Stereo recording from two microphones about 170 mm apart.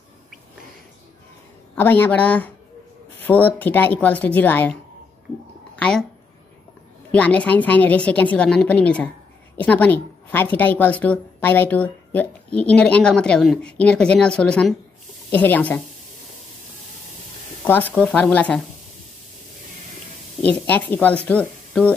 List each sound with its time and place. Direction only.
1.8 s a woman's voice: 10° left (ahead or behind)
5.8 s speech: 5° left (ahead or behind)
7.1 s a woman's voice: 10° left (ahead or behind)
17.6 s a woman's voice: 10° left (ahead or behind)
20.4 s a woman's voice: 10° left (ahead or behind)